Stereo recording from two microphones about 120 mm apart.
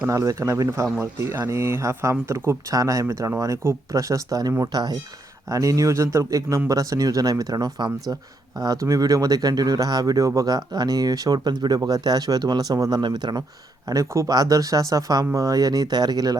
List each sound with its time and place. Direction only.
0.1 s speech: 25° right (ahead or behind)
13.9 s speech: 25° right (ahead or behind)